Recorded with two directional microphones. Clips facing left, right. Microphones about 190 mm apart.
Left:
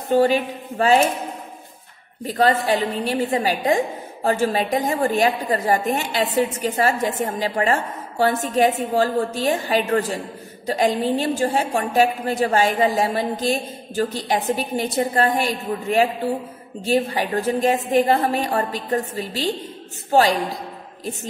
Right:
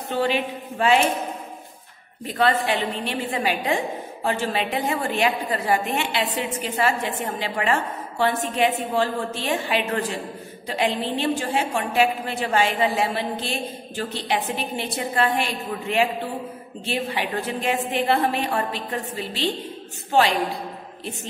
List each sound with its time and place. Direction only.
0.1 s a woman's voice: 40° left (ahead or behind)
2.2 s a woman's voice: 40° left (ahead or behind)